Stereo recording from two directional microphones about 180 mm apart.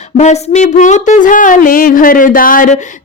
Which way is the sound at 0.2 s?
40° left (ahead or behind).